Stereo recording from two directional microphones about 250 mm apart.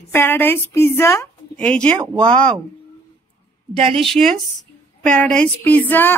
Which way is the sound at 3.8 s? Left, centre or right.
Right.